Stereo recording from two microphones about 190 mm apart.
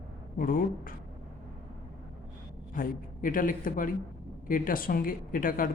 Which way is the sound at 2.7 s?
45° left (ahead or behind).